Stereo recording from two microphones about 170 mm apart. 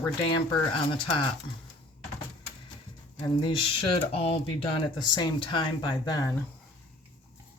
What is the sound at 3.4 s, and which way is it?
Speech, 30° left (ahead or behind).